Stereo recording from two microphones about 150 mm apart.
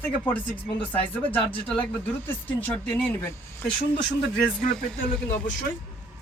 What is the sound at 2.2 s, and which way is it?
Speech, 15° left (ahead or behind).